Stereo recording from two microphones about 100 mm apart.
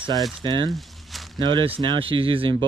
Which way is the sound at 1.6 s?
65° right (ahead or behind).